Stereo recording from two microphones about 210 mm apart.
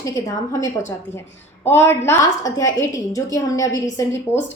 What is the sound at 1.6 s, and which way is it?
A woman's voice, 10° left (ahead or behind).